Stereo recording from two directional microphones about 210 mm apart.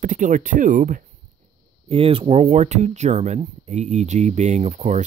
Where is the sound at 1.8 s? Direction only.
25° right (ahead or behind).